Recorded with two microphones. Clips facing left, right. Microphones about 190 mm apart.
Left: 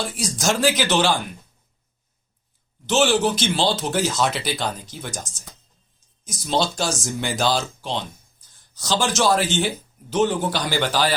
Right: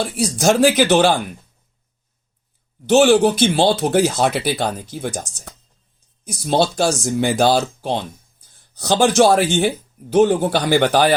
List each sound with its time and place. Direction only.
0.0 s speech: 60° right (ahead or behind)
2.8 s speech: 55° right (ahead or behind)